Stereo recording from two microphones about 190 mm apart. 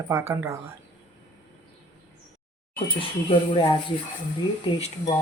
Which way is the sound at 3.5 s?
25° left (ahead or behind).